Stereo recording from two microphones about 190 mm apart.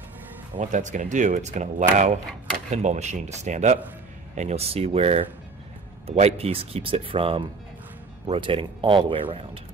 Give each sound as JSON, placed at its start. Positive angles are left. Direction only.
{"t": 0.6, "sound": "speech", "side_deg": -40}